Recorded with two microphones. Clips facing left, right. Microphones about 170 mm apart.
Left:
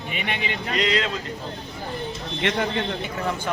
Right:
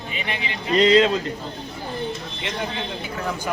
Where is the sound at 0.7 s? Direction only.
30° right (ahead or behind).